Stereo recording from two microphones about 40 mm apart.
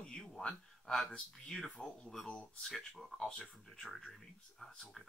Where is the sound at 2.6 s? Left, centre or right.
Centre.